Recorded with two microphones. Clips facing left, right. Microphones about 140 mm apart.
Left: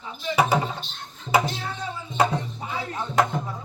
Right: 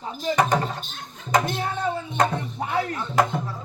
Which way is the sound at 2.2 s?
5° left (ahead or behind).